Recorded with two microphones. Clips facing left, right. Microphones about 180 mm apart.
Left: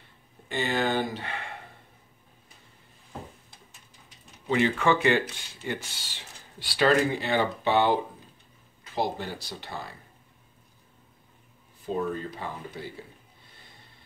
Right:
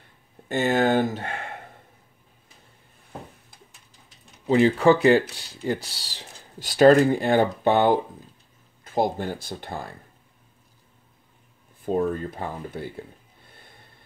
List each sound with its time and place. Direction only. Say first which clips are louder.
0.5 s speech: right 6 dB; 45° right (ahead or behind)
4.5 s speech: right 6 dB; 35° right (ahead or behind)
11.8 s speech: right 5 dB; 50° right (ahead or behind)
13.5 s snort: right 5 dB; 55° right (ahead or behind)